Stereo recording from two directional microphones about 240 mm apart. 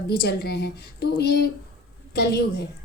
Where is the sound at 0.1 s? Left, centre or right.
Left.